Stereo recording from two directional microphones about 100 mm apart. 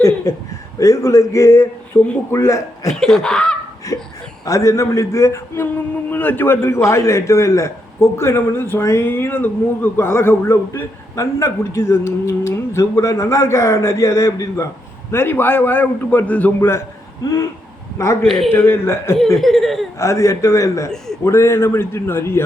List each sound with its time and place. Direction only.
0.8 s a man's voice: 35° left (ahead or behind)
2.0 s a man's voice: 20° left (ahead or behind)
2.3 s speech: 30° left (ahead or behind)
2.9 s speech: 5° left (ahead or behind)
3.9 s a man's voice: 35° left (ahead or behind)
17.9 s a man's voice: 30° left (ahead or behind)
19.4 s speech: 5° left (ahead or behind)
20.0 s a man's voice: 30° left (ahead or behind)